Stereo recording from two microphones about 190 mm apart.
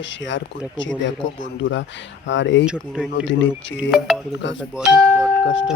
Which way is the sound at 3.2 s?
75° left (ahead or behind).